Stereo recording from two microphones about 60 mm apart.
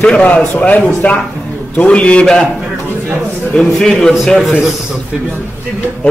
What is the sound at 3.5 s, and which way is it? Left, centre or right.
Speech, centre.